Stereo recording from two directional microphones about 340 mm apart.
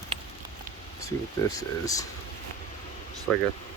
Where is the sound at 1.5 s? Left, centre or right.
Centre.